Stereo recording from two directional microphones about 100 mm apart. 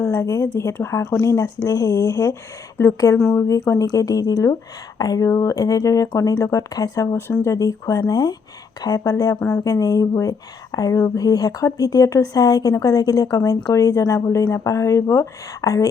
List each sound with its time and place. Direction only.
0.0 s speech: 35° left (ahead or behind)